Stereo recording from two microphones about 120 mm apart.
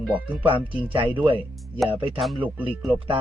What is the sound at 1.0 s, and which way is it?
Speech, 45° right (ahead or behind).